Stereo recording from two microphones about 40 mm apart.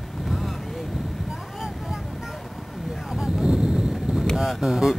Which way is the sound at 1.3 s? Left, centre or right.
Centre.